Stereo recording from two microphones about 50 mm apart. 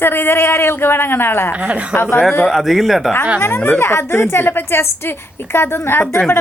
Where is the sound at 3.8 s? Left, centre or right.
Left.